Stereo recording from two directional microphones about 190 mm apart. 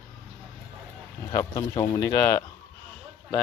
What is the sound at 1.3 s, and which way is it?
Speech, 20° left (ahead or behind).